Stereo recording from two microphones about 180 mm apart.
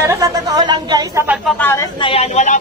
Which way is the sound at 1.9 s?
30° left (ahead or behind).